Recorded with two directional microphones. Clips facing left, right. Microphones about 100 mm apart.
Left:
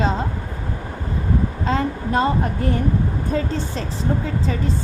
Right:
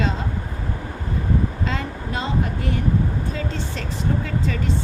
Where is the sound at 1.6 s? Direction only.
40° left (ahead or behind).